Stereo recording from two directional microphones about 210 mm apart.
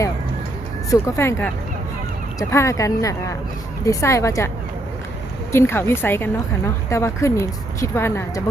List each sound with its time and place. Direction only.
0.9 s speech: 15° left (ahead or behind)